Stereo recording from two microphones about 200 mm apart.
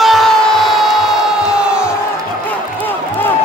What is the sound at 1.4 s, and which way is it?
Crowd, 5° right (ahead or behind).